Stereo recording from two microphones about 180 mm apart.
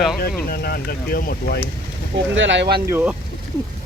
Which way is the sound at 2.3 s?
90° right.